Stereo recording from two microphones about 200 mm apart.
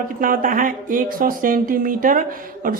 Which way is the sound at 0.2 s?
45° right (ahead or behind).